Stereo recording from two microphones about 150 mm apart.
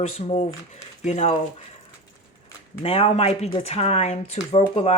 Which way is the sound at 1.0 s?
45° left (ahead or behind).